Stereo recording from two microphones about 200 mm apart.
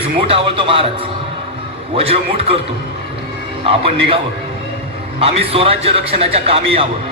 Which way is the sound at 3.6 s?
30° right (ahead or behind).